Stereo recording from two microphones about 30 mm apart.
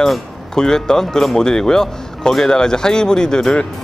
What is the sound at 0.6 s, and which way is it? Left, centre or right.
Speech, centre.